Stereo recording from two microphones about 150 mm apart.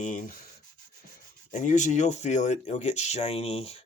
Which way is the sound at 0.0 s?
60° left (ahead or behind).